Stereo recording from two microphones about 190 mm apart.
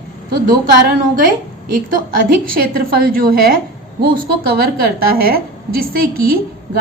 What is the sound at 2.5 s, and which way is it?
A woman's voice, 50° right (ahead or behind).